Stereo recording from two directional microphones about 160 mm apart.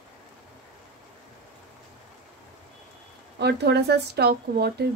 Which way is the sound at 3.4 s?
90° right.